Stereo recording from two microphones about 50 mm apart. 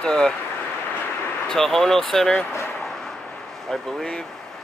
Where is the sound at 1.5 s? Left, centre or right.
Centre.